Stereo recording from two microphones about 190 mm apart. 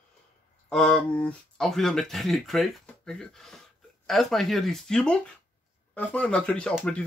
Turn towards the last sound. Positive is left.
turn(degrees=5)  # may be behind; listen again after turning